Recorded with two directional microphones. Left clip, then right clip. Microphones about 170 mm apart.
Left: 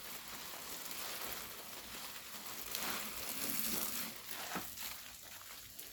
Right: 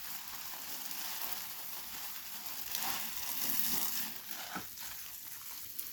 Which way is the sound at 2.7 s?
40° right (ahead or behind).